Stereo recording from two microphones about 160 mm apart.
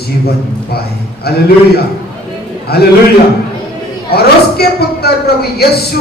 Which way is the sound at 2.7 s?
75° left (ahead or behind).